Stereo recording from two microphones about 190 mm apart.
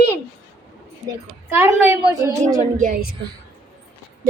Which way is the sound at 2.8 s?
50° right (ahead or behind).